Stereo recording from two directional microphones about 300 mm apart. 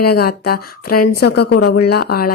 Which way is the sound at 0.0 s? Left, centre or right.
Left.